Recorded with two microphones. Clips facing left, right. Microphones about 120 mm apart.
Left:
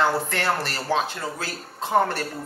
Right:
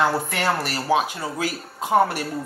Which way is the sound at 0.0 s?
10° right (ahead or behind).